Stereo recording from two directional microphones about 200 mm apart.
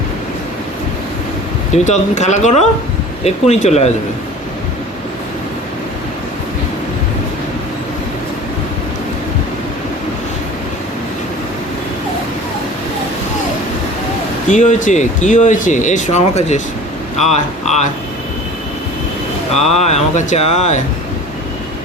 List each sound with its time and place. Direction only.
1.7 s speech: 35° left (ahead or behind)
14.5 s speech: 40° left (ahead or behind)
19.5 s speech: 35° left (ahead or behind)